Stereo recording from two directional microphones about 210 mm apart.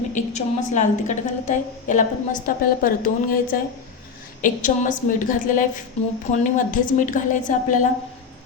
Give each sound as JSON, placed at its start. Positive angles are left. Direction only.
{"t": 0.1, "sound": "a woman's voice", "side_deg": 35}